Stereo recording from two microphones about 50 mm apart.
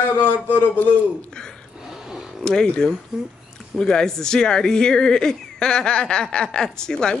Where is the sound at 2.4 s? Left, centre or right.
Centre.